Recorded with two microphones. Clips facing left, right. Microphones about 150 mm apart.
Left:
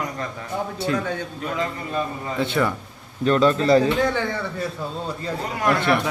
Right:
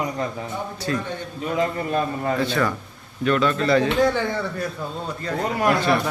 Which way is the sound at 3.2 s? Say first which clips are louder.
Left 2 dB; 35° left (ahead or behind).